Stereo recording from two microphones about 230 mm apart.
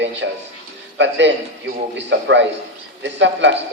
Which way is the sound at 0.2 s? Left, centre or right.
Right.